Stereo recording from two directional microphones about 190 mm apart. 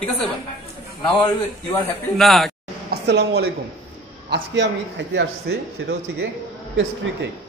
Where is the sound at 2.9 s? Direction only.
60° right (ahead or behind).